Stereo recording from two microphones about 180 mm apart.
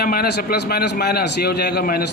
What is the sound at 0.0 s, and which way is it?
A man's voice, 60° left (ahead or behind).